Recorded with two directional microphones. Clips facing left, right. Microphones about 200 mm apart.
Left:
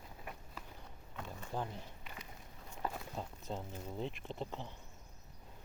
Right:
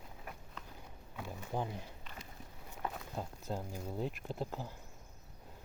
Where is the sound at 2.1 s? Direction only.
10° left (ahead or behind).